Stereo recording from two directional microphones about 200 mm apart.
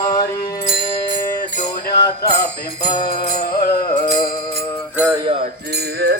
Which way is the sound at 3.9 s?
25° left (ahead or behind).